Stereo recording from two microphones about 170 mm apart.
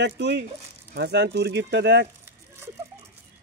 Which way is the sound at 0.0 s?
90° right.